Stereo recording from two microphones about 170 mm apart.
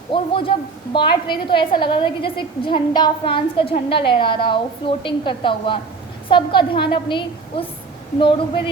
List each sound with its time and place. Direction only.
0.1 s a man's voice: 30° left (ahead or behind)